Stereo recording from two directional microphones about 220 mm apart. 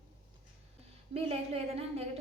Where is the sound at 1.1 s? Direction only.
25° right (ahead or behind).